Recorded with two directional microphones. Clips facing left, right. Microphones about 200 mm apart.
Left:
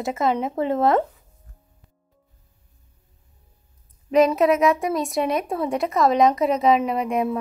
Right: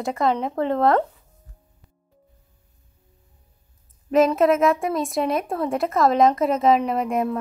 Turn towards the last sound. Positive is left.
turn(degrees=0)  # may be behind; listen again after turning